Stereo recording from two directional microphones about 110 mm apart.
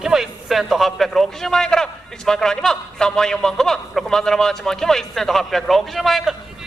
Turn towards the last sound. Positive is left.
turn(degrees=0)  # may be behind; listen again after turning